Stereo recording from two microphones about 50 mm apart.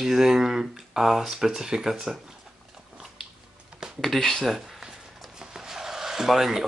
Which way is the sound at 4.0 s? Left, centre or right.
Centre.